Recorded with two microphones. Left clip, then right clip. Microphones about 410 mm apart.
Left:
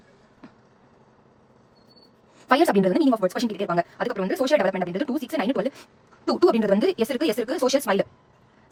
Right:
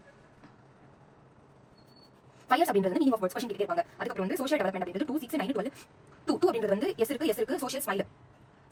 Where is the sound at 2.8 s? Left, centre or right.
Left.